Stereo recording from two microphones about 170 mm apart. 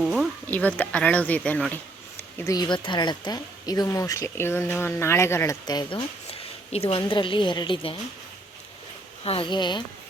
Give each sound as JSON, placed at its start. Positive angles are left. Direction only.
{"t": 0.0, "sound": "a sound", "side_deg": 0}
{"t": 0.4, "sound": "speech", "side_deg": 10}
{"t": 2.4, "sound": "speech", "side_deg": 20}
{"t": 9.2, "sound": "speech", "side_deg": 35}